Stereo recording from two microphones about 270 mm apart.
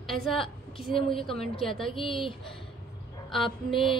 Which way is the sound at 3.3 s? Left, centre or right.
Centre.